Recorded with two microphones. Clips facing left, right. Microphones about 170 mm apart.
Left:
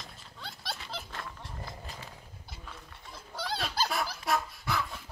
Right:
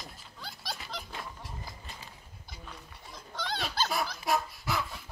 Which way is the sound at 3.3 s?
5° left (ahead or behind).